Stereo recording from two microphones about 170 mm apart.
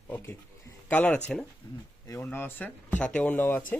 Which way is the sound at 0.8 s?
10° left (ahead or behind).